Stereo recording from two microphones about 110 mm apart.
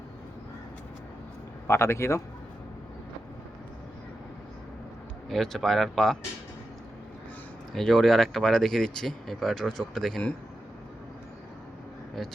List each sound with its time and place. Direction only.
1.6 s speech: 25° left (ahead or behind)
5.3 s speech: 5° left (ahead or behind)
7.8 s speech: centre (ahead or behind)